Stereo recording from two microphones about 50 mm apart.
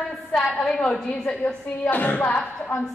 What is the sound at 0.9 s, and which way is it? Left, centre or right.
Speech, left.